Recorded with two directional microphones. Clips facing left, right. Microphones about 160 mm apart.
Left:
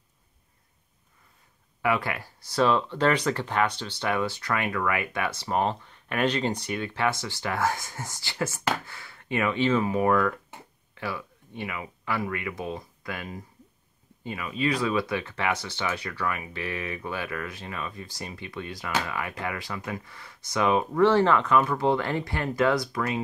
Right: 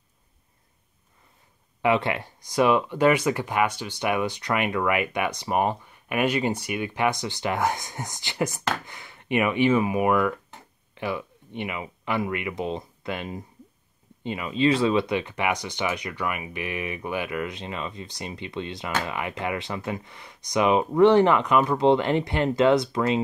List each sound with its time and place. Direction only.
1.8 s speech: 25° right (ahead or behind)